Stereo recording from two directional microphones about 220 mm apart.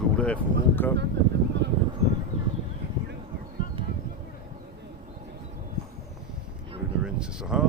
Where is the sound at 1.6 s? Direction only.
50° right (ahead or behind).